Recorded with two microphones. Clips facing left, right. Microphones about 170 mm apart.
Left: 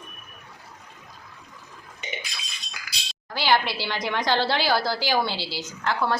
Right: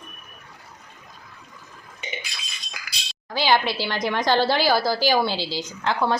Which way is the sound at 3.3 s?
15° right (ahead or behind).